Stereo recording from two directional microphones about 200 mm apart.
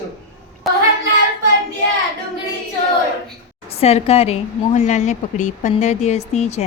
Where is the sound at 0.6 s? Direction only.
Centre (ahead or behind).